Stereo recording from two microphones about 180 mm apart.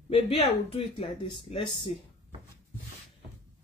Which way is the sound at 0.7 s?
35° left (ahead or behind).